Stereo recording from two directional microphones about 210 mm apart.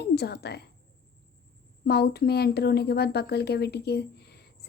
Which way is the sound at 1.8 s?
50° left (ahead or behind).